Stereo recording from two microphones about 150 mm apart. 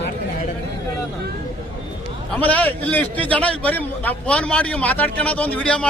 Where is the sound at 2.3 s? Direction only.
10° left (ahead or behind).